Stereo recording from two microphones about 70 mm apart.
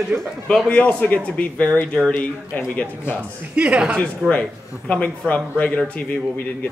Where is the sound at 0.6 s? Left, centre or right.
Left.